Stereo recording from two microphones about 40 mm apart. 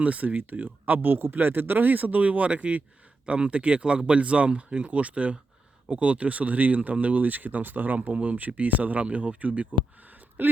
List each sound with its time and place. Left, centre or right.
0.0 s speech: right